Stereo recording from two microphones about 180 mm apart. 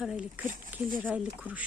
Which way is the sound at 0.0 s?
5° right (ahead or behind).